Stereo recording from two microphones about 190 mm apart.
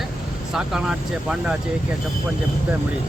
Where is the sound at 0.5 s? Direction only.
5° right (ahead or behind).